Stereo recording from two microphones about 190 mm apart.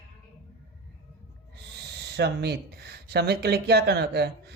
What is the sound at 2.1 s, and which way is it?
Speech, 60° right (ahead or behind).